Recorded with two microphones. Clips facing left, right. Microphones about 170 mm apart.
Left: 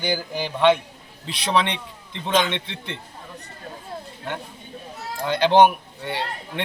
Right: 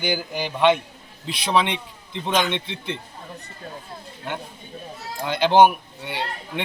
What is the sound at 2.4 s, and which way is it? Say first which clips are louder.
Speech: right 2 dB; 10° right (ahead or behind).